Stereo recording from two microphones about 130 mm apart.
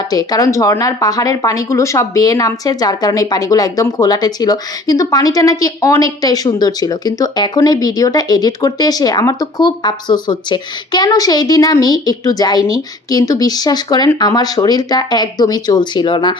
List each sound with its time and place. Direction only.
0.1 s speech: 30° left (ahead or behind)